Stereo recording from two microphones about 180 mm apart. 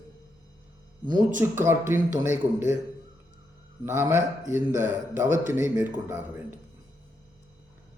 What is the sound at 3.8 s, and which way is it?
Speech, 10° right (ahead or behind).